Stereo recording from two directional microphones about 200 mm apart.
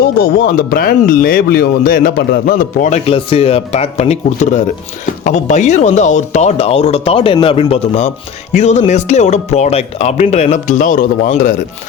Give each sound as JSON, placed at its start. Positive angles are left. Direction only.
{"t": 0.0, "sound": "speech", "side_deg": 50}